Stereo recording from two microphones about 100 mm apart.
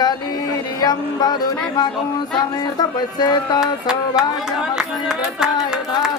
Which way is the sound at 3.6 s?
5° right (ahead or behind).